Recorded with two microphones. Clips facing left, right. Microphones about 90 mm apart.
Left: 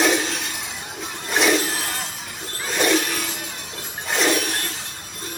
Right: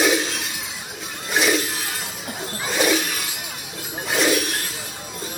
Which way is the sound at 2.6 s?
5° right (ahead or behind).